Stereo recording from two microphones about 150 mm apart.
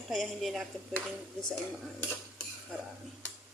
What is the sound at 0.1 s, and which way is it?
Speech, centre (ahead or behind).